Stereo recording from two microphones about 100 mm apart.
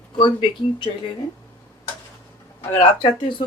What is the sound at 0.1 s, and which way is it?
Speech, 55° left (ahead or behind).